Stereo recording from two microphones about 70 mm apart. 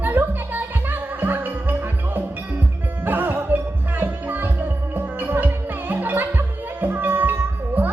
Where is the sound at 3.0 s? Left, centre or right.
Right.